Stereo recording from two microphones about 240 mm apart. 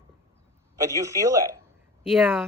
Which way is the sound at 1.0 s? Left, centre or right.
Centre.